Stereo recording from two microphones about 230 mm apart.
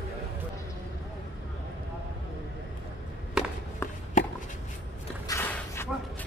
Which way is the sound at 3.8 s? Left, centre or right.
Centre.